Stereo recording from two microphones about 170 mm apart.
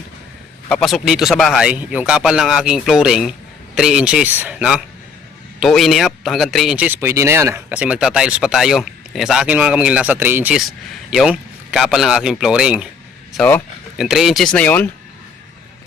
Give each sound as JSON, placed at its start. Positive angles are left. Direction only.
{"t": 0.7, "sound": "speech", "side_deg": 0}
{"t": 13.3, "sound": "speech", "side_deg": 10}
{"t": 14.0, "sound": "speech", "side_deg": -5}